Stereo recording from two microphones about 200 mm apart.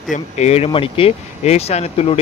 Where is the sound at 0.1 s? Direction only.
35° left (ahead or behind).